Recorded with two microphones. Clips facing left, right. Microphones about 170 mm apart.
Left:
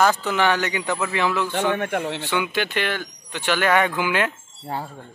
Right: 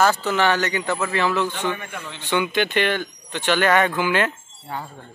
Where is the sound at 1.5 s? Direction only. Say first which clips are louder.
Left 5 dB; 70° left (ahead or behind).